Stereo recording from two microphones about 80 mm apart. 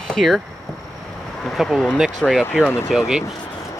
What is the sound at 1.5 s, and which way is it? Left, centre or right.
Speech, centre.